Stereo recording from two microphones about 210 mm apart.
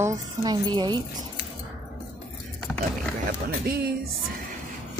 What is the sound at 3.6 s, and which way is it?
Speech, 50° right (ahead or behind).